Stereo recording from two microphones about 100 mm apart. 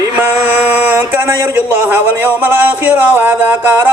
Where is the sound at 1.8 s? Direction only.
20° right (ahead or behind).